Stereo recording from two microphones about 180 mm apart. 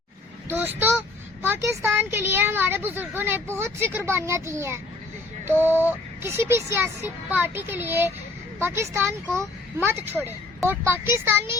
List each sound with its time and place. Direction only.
0.4 s a woman's voice: 10° right (ahead or behind)